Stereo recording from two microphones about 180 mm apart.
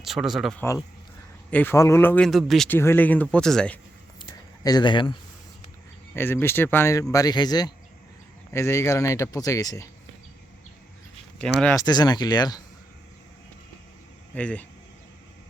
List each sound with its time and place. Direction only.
0.0 s speech: centre (ahead or behind)
1.5 s speech: 10° left (ahead or behind)
2.6 s speech: 10° left (ahead or behind)
4.2 s a sound: 20° left (ahead or behind)
6.1 s speech: 15° left (ahead or behind)
11.6 s speech: 10° left (ahead or behind)
11.9 s speech: 20° left (ahead or behind)
14.3 s speech: 5° left (ahead or behind)